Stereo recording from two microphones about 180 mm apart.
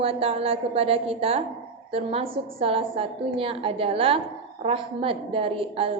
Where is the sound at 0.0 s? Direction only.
35° right (ahead or behind).